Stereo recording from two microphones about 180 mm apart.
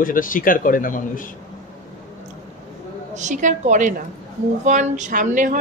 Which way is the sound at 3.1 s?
40° right (ahead or behind).